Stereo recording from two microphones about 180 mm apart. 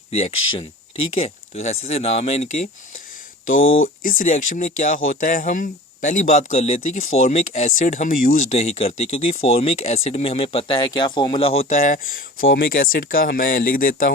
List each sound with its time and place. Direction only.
0.1 s speech: 35° left (ahead or behind)
3.5 s speech: 90° left
4.0 s speech: 50° left (ahead or behind)
8.4 s speech: 35° left (ahead or behind); by 14.1 s 50° left (ahead or behind)